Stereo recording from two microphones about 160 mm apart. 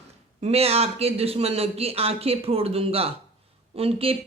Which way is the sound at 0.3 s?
40° right (ahead or behind).